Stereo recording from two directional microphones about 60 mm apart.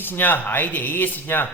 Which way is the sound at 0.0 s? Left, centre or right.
Left.